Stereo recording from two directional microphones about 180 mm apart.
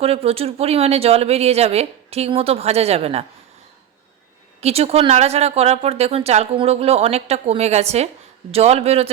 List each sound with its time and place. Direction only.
0.0 s speech: 35° right (ahead or behind)
4.6 s speech: 35° right (ahead or behind)